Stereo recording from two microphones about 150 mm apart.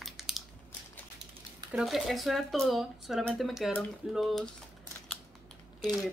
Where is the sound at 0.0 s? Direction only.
Centre (ahead or behind).